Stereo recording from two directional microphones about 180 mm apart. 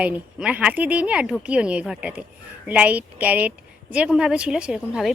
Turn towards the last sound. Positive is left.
turn(degrees=-5)  # may be behind; listen again after turning